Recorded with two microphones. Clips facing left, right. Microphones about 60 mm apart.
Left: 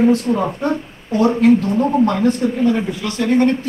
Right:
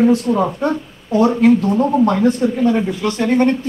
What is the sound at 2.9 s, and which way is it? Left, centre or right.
Speech, right.